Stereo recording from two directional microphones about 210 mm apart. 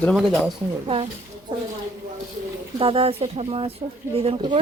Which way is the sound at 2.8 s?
25° right (ahead or behind).